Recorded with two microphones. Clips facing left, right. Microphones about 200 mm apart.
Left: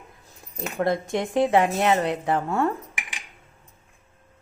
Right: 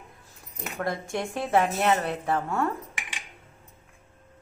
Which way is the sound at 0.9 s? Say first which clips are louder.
Left 4 dB; 20° left (ahead or behind).